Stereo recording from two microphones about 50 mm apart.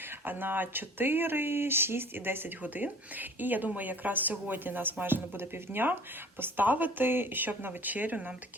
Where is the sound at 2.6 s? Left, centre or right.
Right.